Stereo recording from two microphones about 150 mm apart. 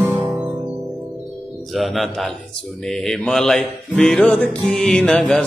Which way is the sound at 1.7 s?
Centre (ahead or behind).